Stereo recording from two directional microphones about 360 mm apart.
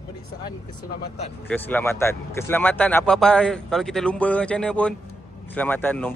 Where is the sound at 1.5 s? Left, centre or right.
Centre.